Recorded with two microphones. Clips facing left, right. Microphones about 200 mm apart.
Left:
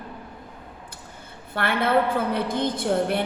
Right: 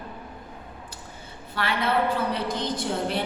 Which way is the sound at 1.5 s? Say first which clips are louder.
Left 4 dB; 55° left (ahead or behind).